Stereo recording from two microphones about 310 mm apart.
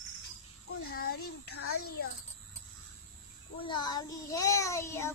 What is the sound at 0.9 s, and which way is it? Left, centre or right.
Speech, left.